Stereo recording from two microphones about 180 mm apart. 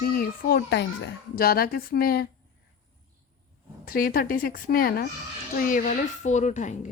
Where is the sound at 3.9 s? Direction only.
55° left (ahead or behind).